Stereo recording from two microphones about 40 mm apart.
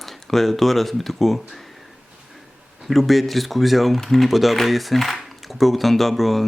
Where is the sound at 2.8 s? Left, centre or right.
Centre.